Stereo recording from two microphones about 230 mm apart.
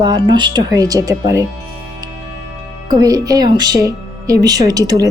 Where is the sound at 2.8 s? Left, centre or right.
Centre.